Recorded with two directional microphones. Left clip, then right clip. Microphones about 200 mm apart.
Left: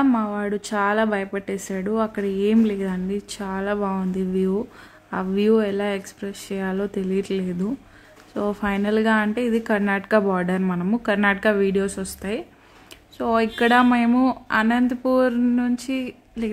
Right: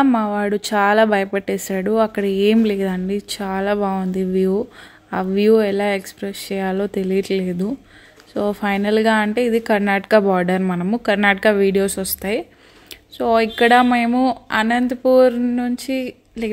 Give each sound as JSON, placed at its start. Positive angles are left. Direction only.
{"t": 0.0, "sound": "speech", "side_deg": -15}